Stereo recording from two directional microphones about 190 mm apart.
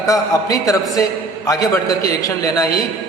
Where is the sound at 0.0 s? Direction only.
20° left (ahead or behind).